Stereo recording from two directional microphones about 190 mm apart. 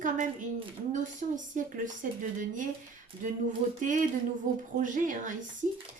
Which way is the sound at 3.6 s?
35° right (ahead or behind).